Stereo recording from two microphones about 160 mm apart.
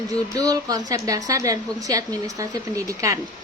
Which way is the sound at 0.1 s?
20° right (ahead or behind).